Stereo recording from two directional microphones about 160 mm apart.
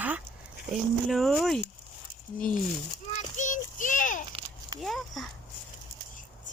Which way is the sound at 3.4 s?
50° left (ahead or behind).